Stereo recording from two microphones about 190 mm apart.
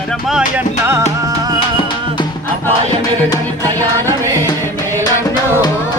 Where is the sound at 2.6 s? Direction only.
15° left (ahead or behind).